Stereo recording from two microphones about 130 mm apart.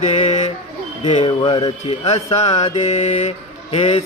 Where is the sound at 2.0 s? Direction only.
55° left (ahead or behind).